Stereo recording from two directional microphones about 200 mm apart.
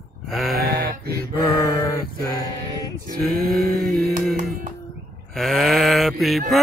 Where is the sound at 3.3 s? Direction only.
Centre (ahead or behind).